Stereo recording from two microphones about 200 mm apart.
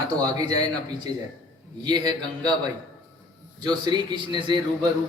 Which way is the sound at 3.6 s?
20° right (ahead or behind).